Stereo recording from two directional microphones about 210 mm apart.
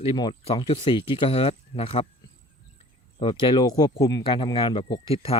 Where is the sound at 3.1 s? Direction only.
25° left (ahead or behind).